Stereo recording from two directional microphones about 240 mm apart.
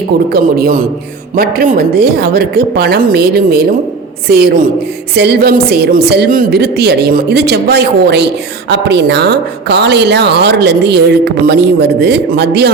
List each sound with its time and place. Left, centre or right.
0.3 s a woman's voice: right